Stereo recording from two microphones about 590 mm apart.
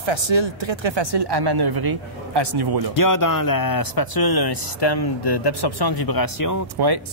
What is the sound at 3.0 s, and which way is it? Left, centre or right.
Speech, left.